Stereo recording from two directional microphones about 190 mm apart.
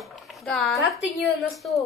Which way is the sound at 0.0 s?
Centre (ahead or behind).